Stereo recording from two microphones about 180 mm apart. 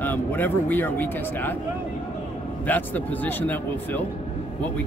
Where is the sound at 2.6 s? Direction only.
10° left (ahead or behind).